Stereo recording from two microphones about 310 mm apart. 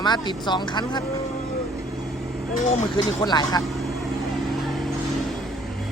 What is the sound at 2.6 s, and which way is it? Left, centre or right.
Speech, centre.